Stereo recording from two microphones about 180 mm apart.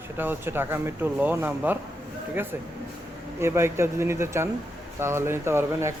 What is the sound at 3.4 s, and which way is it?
Speech, 15° right (ahead or behind).